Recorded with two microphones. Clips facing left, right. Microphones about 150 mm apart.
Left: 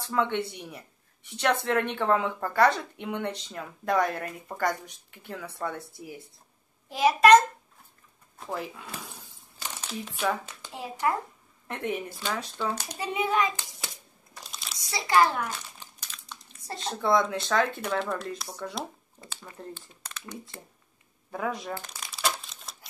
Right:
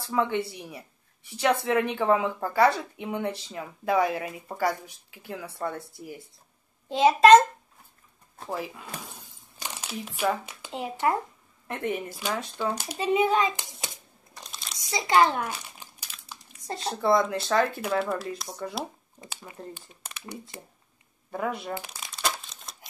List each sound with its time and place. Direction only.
0.1 s speech: 5° right (ahead or behind)
6.9 s a child's voice: 25° right (ahead or behind)
8.5 s speech: 5° right (ahead or behind)
9.1 s crumpling: 15° right (ahead or behind)
10.7 s a child's voice: 20° right (ahead or behind)
11.6 s speech: centre (ahead or behind)
12.9 s a child's voice: 25° right (ahead or behind)
14.5 s crumpling: centre (ahead or behind)
14.8 s crumpling: 20° right (ahead or behind)
16.8 s speech: centre (ahead or behind)
21.3 s speech: 5° right (ahead or behind)
22.1 s crumpling: centre (ahead or behind)